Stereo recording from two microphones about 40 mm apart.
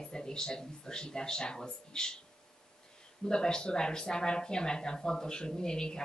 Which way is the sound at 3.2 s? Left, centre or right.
Centre.